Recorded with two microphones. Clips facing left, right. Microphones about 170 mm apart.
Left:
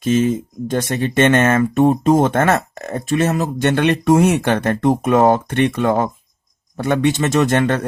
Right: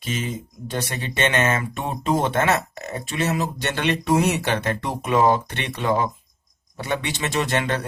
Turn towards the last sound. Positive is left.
turn(degrees=50)  # may be behind; listen again after turning